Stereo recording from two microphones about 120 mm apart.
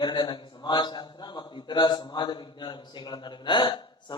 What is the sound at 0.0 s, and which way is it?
A man's voice, 40° left (ahead or behind).